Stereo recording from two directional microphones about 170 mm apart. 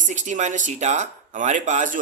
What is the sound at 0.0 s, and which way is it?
Speech, 45° right (ahead or behind).